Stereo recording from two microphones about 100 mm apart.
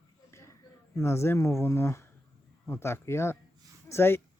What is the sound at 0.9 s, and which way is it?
Speech, 25° left (ahead or behind).